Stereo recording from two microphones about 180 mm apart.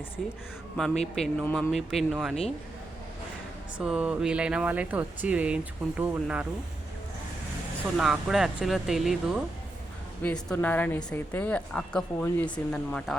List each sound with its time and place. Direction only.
0.2 s speech: centre (ahead or behind)
3.8 s speech: 5° right (ahead or behind)
7.9 s speech: 5° right (ahead or behind)
10.2 s a woman's voice: 10° left (ahead or behind)